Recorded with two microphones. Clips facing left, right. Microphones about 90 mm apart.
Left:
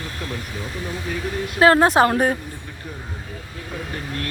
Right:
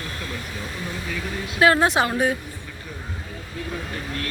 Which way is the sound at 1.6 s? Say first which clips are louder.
Left 4 dB; 35° left (ahead or behind).